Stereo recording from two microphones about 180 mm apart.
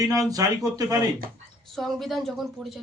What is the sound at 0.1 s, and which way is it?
Speech, 20° right (ahead or behind).